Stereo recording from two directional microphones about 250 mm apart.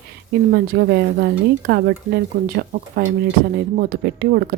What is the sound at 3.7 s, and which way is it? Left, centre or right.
Speech, right.